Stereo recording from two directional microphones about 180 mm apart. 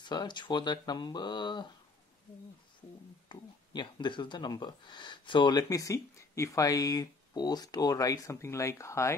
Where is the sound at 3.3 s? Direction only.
25° left (ahead or behind).